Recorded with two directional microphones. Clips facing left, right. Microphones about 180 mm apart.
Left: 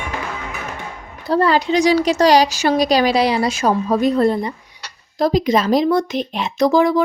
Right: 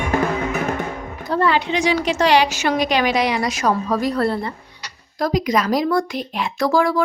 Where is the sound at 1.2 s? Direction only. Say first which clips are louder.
Left 3 dB; 35° left (ahead or behind).